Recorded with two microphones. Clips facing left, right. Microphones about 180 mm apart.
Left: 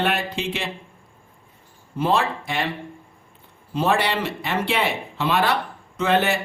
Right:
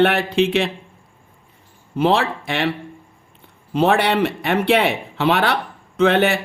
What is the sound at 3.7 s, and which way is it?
A man's voice, 65° right (ahead or behind).